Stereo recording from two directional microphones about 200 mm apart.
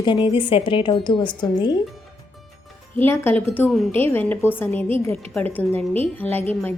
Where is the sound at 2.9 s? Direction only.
10° left (ahead or behind).